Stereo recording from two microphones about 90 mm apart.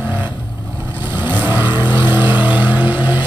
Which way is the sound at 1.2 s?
20° right (ahead or behind).